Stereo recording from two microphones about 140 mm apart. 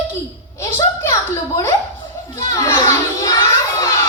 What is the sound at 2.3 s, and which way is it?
Children playing, 20° left (ahead or behind).